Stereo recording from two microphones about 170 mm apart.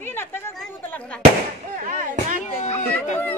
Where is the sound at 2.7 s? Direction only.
40° left (ahead or behind).